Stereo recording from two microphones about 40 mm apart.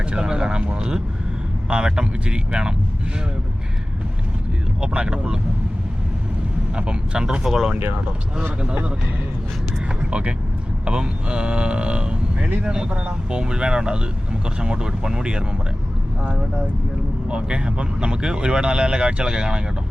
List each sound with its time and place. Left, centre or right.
0.0 s a sound: right
1.7 s speech: right
4.8 s speech: right
6.7 s speech: right
7.4 s speech: centre
8.6 s a man's voice: right
10.0 s vehicle: right
10.8 s speech: right
17.2 s speech: right